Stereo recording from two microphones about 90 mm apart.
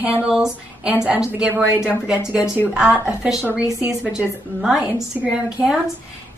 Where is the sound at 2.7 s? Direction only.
15° right (ahead or behind).